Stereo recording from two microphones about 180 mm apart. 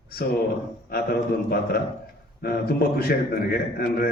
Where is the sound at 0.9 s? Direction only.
60° left (ahead or behind).